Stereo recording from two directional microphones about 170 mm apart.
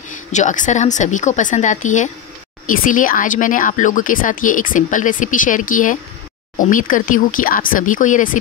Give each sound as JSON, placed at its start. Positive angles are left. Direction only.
{"t": 0.3, "sound": "speech", "side_deg": 45}